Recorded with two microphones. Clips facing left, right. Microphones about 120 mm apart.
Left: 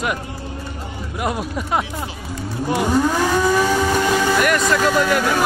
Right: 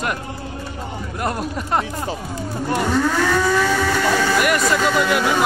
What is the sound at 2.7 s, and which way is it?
Speech, 10° left (ahead or behind).